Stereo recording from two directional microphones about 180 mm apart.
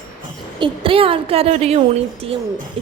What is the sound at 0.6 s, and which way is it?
A woman's voice, 30° right (ahead or behind).